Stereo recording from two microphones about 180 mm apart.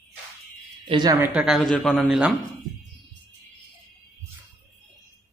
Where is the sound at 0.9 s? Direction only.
25° right (ahead or behind).